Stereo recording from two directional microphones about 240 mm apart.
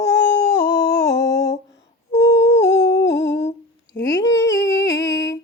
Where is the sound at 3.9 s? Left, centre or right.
Left.